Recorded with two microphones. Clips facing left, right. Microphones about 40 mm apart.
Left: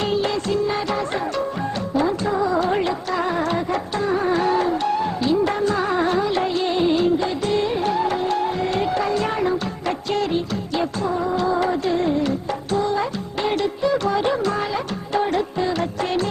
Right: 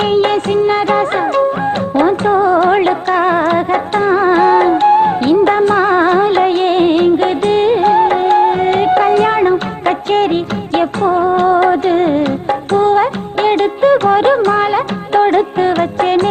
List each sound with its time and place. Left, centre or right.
0.0 s music of bollywood: right
2.0 s music: right